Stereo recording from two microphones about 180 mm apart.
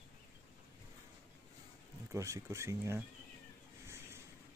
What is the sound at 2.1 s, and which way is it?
Speech, 15° right (ahead or behind).